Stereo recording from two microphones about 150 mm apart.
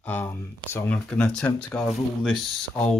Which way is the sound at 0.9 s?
5° left (ahead or behind).